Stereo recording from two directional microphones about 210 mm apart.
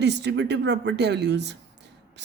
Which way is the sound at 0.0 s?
55° right (ahead or behind).